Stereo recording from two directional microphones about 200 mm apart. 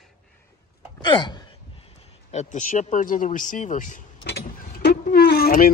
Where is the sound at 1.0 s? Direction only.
20° left (ahead or behind).